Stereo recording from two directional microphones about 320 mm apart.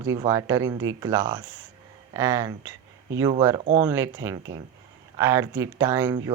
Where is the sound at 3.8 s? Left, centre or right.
Centre.